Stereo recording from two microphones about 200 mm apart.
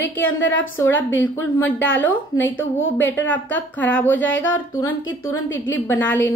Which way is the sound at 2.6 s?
70° left (ahead or behind).